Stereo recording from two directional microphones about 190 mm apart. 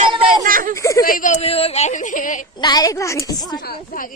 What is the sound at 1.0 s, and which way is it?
Speech, 45° left (ahead or behind).